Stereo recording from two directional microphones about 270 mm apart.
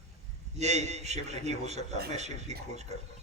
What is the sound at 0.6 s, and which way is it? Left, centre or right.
A man's voice, right.